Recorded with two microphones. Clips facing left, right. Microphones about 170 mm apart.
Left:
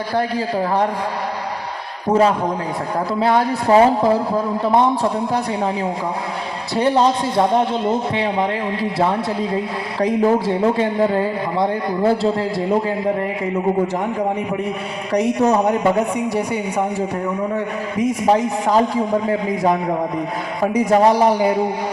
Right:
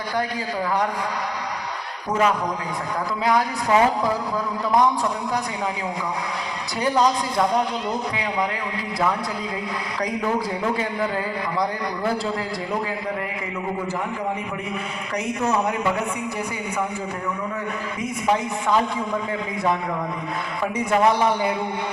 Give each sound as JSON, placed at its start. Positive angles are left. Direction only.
{"t": 0.2, "sound": "a man's voice", "side_deg": 30}
{"t": 2.0, "sound": "a man's voice", "side_deg": 30}
{"t": 6.7, "sound": "a man's voice", "side_deg": 30}
{"t": 15.1, "sound": "a man's voice", "side_deg": 35}
{"t": 17.9, "sound": "a man's voice", "side_deg": 35}